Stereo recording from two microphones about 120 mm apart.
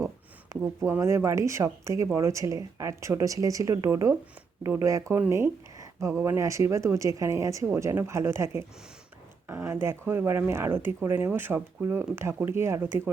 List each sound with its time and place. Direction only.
0.5 s speech: 20° right (ahead or behind)